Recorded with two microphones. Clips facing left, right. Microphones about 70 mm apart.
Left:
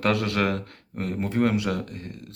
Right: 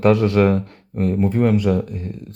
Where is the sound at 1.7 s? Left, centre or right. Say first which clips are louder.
Right 9 dB; centre.